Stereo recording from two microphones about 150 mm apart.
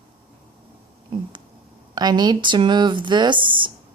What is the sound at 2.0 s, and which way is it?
Speech, 30° right (ahead or behind).